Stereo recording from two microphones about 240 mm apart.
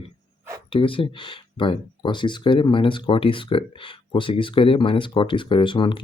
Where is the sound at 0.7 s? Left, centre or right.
Left.